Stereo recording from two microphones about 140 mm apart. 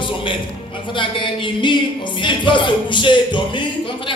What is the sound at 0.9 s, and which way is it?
Speech, 35° left (ahead or behind).